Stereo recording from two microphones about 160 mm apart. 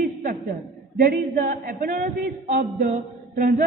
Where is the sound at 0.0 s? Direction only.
60° right (ahead or behind).